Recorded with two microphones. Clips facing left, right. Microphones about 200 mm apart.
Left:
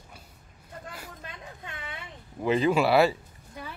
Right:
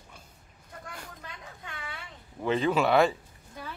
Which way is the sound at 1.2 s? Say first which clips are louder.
Left 2 dB; 20° left (ahead or behind).